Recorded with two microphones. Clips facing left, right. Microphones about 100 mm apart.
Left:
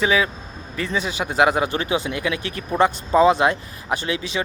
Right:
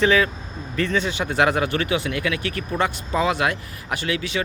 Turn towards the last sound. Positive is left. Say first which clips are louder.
# left 1 dB
turn(degrees=25)  # may be behind; listen again after turning